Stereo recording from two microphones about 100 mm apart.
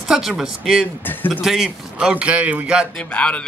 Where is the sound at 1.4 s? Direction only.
5° right (ahead or behind).